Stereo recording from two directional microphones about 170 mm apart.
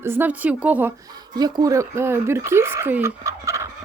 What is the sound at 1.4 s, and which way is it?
Speech, 25° right (ahead or behind).